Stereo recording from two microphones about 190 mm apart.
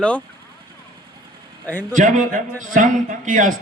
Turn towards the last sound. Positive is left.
turn(degrees=-45)  # may be behind; listen again after turning